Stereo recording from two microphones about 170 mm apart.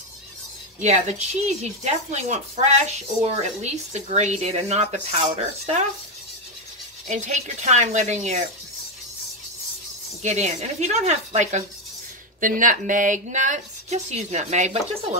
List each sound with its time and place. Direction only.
0.7 s speech: 40° right (ahead or behind)
7.1 s speech: 45° right (ahead or behind)
10.2 s speech: 45° right (ahead or behind)